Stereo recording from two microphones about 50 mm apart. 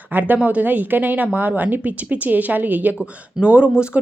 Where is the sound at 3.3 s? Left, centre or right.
Right.